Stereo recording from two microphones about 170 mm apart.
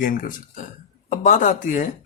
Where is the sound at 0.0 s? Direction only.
55° left (ahead or behind).